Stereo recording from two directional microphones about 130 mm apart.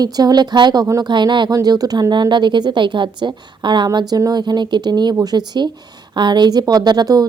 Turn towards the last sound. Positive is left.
turn(degrees=-30)  # may be behind; listen again after turning